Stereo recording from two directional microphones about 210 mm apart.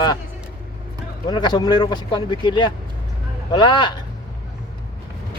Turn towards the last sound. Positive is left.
turn(degrees=20)  # may be behind; listen again after turning